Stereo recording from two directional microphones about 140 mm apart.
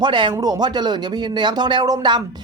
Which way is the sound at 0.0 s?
35° right (ahead or behind).